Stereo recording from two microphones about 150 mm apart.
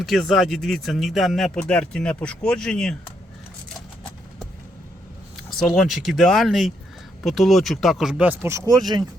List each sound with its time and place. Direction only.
0.0 s speech: centre (ahead or behind)
5.5 s speech: centre (ahead or behind)
8.4 s speech: 20° right (ahead or behind)